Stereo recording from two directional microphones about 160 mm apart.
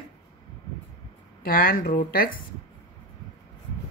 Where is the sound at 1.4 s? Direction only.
65° left (ahead or behind).